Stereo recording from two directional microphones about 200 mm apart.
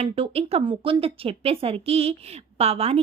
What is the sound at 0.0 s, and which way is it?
A woman's voice, 30° right (ahead or behind).